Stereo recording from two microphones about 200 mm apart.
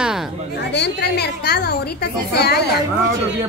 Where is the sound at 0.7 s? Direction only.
55° left (ahead or behind).